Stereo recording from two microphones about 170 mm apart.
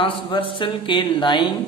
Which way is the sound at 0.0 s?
30° left (ahead or behind).